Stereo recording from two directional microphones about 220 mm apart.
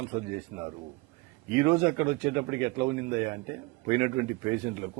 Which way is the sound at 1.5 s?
10° right (ahead or behind).